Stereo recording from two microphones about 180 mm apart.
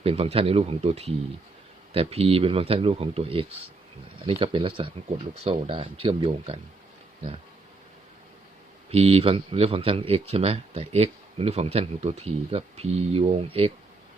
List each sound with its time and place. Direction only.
0.0 s speech: 35° right (ahead or behind)
8.9 s speech: 35° right (ahead or behind)